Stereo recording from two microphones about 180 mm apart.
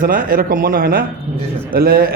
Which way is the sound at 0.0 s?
50° right (ahead or behind).